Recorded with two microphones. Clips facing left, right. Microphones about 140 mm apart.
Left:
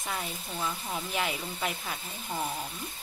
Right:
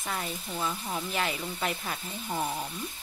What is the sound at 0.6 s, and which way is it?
Speech, 10° right (ahead or behind).